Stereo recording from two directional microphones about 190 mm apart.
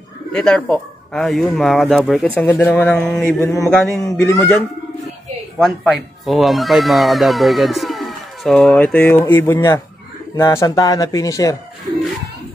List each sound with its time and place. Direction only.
0.3 s speech: 5° left (ahead or behind)
2.4 s speech: 15° left (ahead or behind)
5.6 s speech: centre (ahead or behind); by 11.5 s 20° left (ahead or behind)